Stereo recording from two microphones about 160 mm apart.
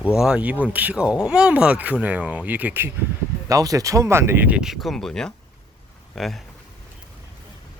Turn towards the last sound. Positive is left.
turn(degrees=0)  # may be behind; listen again after turning